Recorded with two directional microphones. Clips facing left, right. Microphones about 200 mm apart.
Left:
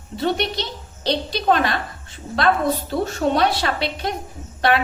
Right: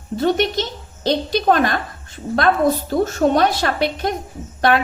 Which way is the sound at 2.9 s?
45° right (ahead or behind).